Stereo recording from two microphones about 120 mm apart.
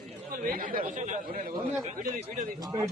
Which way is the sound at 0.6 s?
90° right.